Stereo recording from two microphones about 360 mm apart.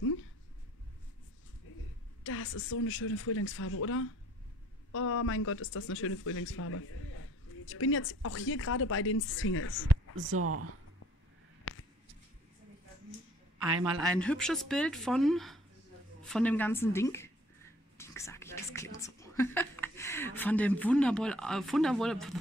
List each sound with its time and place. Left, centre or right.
1.7 s a sound: left
2.2 s speech: left
10.1 s speech: right
11.7 s a sound: left
14.0 s speech: centre
17.9 s whispering: centre